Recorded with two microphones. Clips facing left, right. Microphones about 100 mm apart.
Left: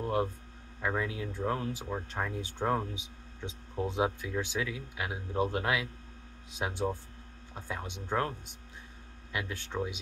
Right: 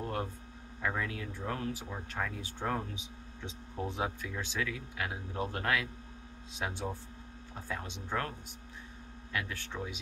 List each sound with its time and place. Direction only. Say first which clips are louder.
0.8 s speech: left 3 dB; 15° left (ahead or behind)
9.3 s speech: left 2 dB; 20° left (ahead or behind)